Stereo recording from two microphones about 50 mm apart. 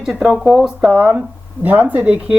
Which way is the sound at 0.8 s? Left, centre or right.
Right.